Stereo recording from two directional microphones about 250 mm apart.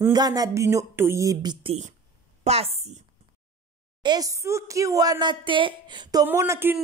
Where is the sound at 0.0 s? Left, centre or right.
Centre.